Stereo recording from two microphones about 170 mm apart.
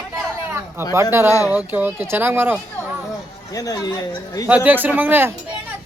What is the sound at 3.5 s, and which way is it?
Speech, 20° left (ahead or behind).